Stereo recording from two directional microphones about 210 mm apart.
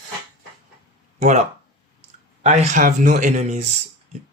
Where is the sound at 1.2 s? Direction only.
35° right (ahead or behind).